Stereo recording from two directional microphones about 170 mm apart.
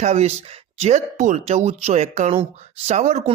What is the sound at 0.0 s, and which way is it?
Speech, 40° right (ahead or behind).